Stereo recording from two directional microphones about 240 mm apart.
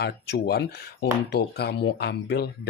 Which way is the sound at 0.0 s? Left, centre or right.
Left.